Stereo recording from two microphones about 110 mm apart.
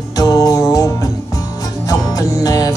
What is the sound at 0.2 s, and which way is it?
Music, 35° left (ahead or behind).